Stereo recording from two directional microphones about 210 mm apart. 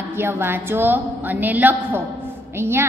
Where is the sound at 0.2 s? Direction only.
10° right (ahead or behind).